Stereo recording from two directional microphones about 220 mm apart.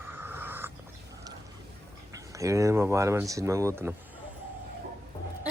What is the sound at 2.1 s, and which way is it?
Speech, 15° right (ahead or behind).